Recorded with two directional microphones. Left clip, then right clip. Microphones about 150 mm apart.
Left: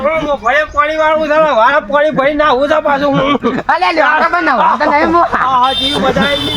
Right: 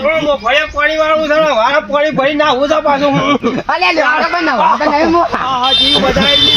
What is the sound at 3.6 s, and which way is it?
Speech, 45° right (ahead or behind).